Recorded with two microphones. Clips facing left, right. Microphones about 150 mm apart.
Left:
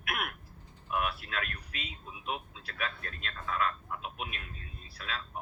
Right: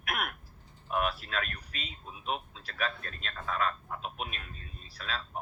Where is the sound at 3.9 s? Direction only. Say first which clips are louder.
Right 1 dB; 40° right (ahead or behind).